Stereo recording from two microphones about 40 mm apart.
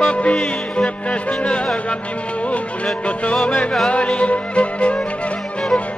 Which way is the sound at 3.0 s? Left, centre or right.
Left.